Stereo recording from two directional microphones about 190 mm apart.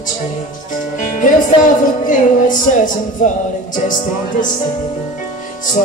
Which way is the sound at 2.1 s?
45° left (ahead or behind).